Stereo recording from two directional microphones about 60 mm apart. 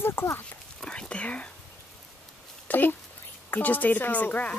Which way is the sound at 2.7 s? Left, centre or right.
Left.